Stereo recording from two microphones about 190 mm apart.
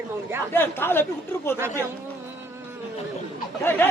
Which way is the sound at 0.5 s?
10° left (ahead or behind).